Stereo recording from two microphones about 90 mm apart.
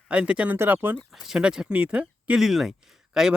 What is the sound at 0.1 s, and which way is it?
Speech, 15° right (ahead or behind).